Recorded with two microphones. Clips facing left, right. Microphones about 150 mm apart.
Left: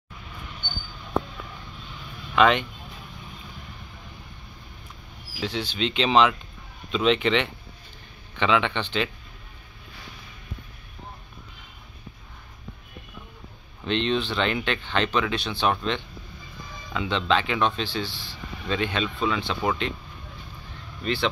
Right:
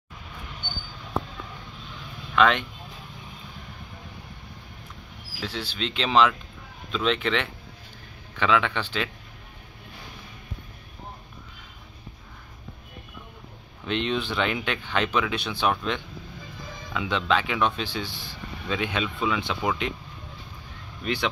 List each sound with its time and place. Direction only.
2.3 s speech: centre (ahead or behind)
5.4 s speech: centre (ahead or behind)
13.8 s speech: 5° right (ahead or behind)
18.1 s speech: 45° right (ahead or behind)
18.7 s speech: 10° right (ahead or behind)
21.0 s speech: 10° right (ahead or behind)